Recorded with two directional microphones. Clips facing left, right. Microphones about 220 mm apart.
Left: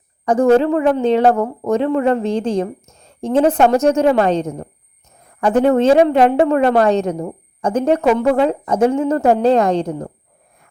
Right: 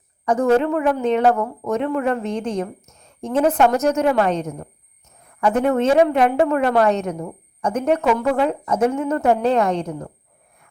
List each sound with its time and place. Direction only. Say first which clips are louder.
0.3 s a woman's voice: left 4 dB; 30° left (ahead or behind)